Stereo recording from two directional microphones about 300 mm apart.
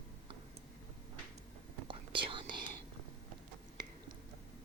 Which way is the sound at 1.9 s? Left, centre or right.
Centre.